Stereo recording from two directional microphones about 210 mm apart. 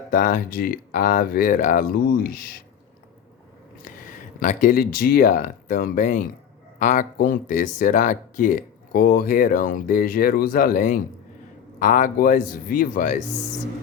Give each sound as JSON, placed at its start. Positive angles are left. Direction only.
{"t": 0.1, "sound": "speech", "side_deg": 40}
{"t": 3.8, "sound": "speech", "side_deg": 40}